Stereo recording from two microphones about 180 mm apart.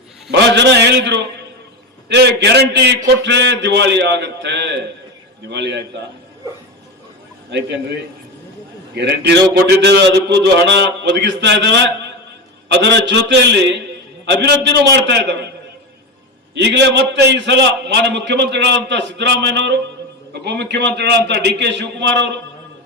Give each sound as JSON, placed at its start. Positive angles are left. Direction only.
{"t": 0.3, "sound": "a man's voice", "side_deg": -75}
{"t": 9.0, "sound": "a man's voice", "side_deg": -70}
{"t": 16.6, "sound": "a man's voice", "side_deg": -70}